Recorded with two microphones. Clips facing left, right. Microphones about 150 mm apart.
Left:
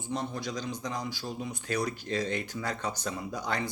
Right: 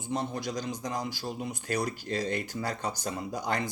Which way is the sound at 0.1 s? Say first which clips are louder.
Right 2 dB; 45° right (ahead or behind).